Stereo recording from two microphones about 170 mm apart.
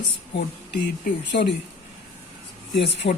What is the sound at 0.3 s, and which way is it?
Speech, 90° left.